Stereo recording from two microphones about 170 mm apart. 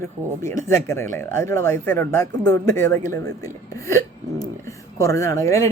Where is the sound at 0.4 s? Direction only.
15° left (ahead or behind).